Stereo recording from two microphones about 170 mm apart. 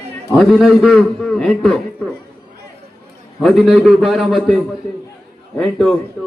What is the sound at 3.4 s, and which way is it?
A man's voice, centre (ahead or behind).